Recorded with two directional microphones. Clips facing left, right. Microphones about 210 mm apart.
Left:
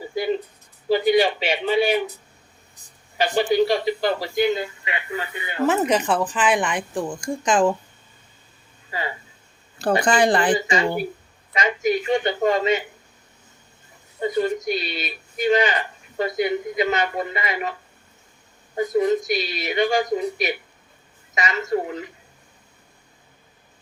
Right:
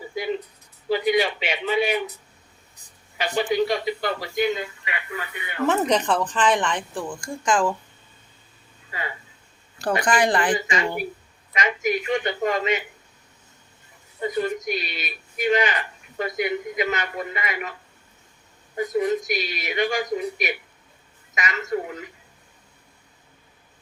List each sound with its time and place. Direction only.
0.9 s speech: 30° left (ahead or behind)
3.2 s speech: 30° left (ahead or behind)
5.6 s speech: 5° left (ahead or behind); by 7.7 s 20° left (ahead or behind)
9.7 s speech: 25° left (ahead or behind)
14.2 s speech: 30° left (ahead or behind)
18.8 s a woman's voice: 30° left (ahead or behind)